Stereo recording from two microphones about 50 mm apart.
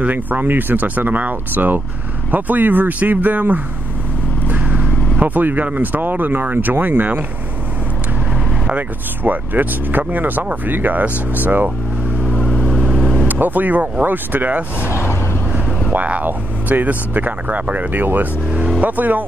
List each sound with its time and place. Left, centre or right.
0.0 s speech: right
4.5 s vehicle: right
5.7 s speech: right
9.2 s speech: right
13.3 s speech: right
15.9 s speech: right